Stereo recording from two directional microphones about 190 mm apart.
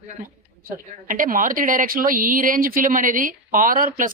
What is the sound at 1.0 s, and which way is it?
A woman's voice, 45° right (ahead or behind).